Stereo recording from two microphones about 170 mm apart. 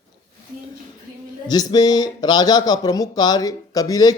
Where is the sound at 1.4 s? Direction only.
25° left (ahead or behind).